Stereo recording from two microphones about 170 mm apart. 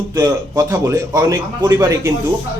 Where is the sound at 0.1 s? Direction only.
20° right (ahead or behind).